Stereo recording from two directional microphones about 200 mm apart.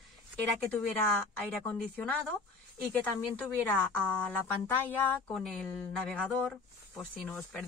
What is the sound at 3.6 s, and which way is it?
A woman's voice, 5° left (ahead or behind).